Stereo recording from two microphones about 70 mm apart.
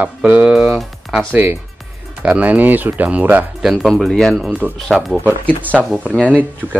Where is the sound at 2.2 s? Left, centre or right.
Right.